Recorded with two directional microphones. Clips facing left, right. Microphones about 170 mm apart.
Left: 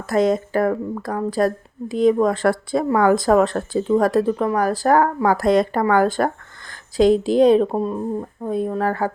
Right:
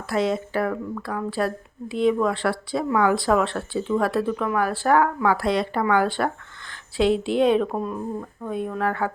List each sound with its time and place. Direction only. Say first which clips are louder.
0.1 s speech: left 5 dB; 45° left (ahead or behind)